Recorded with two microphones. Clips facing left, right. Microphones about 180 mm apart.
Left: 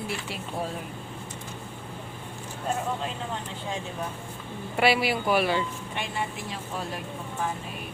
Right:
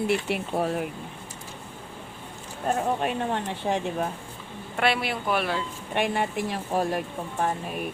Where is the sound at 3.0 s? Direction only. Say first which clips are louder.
Right 6 dB; 65° right (ahead or behind).